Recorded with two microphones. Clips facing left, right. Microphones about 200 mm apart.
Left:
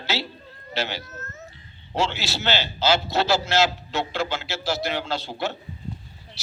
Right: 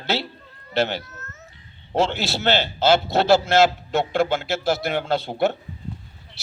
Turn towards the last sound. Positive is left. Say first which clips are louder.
# right 7 dB
turn(degrees=-55)  # may be behind; listen again after turning